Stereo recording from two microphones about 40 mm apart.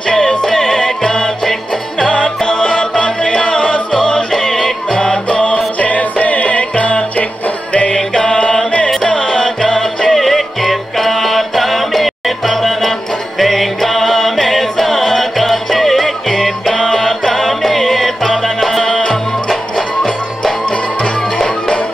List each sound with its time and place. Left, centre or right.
0.0 s music: centre
2.0 s music: left
5.8 s music: left; by 19.6 s centre
21.4 s music: centre